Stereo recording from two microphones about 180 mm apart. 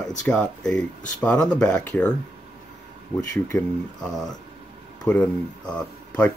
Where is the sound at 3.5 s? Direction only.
15° left (ahead or behind).